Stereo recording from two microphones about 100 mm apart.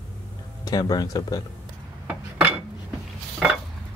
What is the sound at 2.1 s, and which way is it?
Dishes, 15° right (ahead or behind).